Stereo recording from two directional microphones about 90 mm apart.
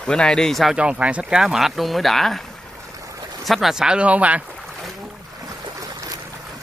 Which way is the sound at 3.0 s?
35° right (ahead or behind).